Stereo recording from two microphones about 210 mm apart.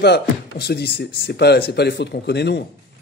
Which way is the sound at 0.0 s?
50° left (ahead or behind).